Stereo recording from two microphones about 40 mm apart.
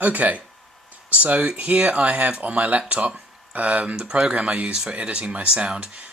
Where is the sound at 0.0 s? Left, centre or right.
Right.